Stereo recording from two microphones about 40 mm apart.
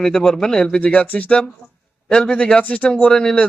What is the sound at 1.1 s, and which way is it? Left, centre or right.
A man's voice, left.